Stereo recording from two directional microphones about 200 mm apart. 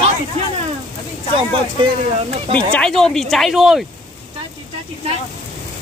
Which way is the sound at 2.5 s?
5° left (ahead or behind).